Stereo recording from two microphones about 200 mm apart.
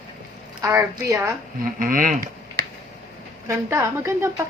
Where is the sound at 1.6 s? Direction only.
45° right (ahead or behind).